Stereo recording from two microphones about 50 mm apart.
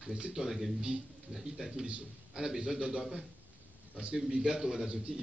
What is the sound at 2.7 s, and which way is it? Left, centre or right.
Speech, centre.